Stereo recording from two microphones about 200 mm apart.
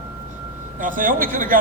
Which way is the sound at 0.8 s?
45° right (ahead or behind).